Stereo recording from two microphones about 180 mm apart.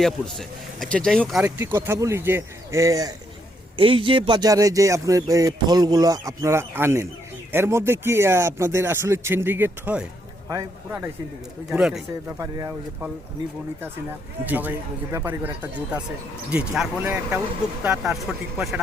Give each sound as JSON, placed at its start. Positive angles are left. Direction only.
{"t": 0.0, "sound": "speech", "side_deg": 0}
{"t": 1.5, "sound": "speech", "side_deg": -10}
{"t": 11.7, "sound": "speech", "side_deg": -5}
{"t": 12.4, "sound": "speech", "side_deg": -20}
{"t": 14.4, "sound": "speech", "side_deg": -10}